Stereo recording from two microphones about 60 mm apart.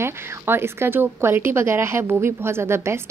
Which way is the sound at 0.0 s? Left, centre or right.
Right.